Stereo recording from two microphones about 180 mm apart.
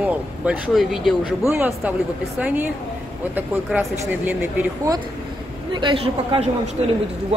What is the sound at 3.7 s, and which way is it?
Speech, 10° right (ahead or behind).